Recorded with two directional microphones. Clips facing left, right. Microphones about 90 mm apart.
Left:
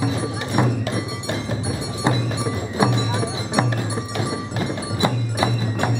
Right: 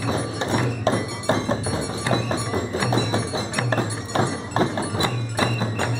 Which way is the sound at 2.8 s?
20° left (ahead or behind).